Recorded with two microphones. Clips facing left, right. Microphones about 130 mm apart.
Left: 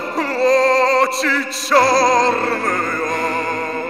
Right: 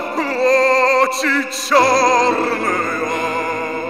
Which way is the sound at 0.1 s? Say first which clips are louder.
Even; centre (ahead or behind).